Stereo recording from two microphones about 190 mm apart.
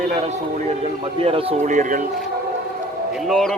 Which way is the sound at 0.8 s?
30° right (ahead or behind).